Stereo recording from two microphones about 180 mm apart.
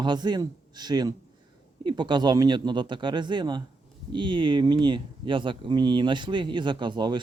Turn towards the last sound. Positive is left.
turn(degrees=-25)  # may be behind; listen again after turning